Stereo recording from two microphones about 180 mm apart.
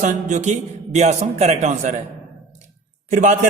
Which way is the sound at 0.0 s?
45° right (ahead or behind).